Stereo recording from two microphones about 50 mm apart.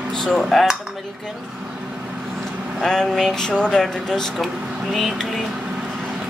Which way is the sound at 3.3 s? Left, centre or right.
Centre.